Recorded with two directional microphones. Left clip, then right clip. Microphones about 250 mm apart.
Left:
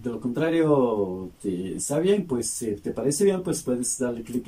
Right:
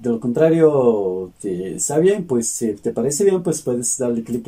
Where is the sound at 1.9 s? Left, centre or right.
Right.